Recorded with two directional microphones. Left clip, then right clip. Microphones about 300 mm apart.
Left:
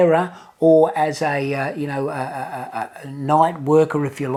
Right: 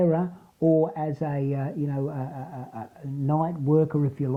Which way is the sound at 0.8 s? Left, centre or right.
Centre.